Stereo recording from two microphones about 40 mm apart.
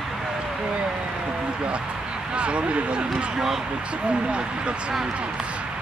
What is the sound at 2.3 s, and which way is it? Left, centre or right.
Speech, right.